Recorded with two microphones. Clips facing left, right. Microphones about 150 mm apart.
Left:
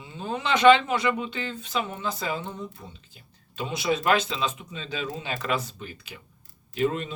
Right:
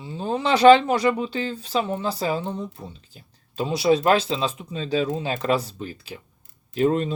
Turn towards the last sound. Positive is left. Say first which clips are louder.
# right 5 dB
turn(degrees=-40)  # may be behind; listen again after turning